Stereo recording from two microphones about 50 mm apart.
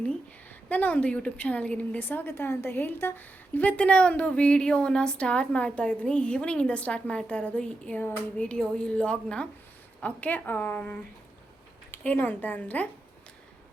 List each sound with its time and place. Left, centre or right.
0.7 s a woman's voice: left
12.0 s a woman's voice: left